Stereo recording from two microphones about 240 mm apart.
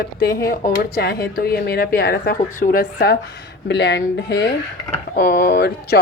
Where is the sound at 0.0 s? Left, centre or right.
Left.